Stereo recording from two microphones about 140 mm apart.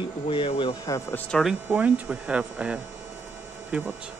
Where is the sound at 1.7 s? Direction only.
10° right (ahead or behind).